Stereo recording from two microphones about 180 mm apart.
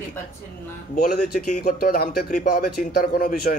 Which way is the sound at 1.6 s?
60° left (ahead or behind).